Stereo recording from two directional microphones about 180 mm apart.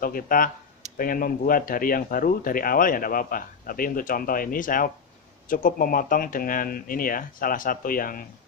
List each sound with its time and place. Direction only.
0.0 s speech: 50° left (ahead or behind)